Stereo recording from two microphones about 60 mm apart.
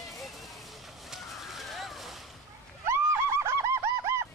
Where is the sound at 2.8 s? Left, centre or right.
Right.